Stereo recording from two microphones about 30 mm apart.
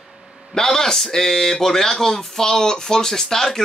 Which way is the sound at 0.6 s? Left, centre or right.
Centre.